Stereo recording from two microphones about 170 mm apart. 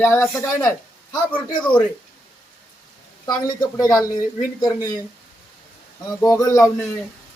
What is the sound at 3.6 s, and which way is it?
Speech, 25° left (ahead or behind).